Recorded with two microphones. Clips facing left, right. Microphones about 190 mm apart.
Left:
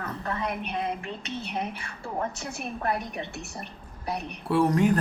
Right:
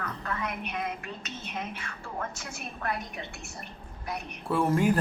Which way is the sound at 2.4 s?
30° left (ahead or behind).